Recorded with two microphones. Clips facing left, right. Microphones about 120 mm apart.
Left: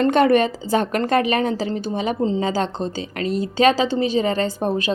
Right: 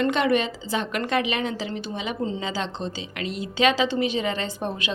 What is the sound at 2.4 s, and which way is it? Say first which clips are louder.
A woman's voice: left 7 dB; 45° left (ahead or behind).